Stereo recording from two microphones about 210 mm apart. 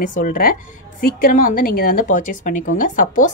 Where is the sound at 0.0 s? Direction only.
40° left (ahead or behind).